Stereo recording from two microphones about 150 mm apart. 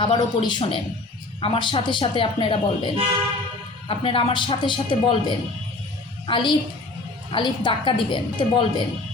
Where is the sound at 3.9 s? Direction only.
35° left (ahead or behind).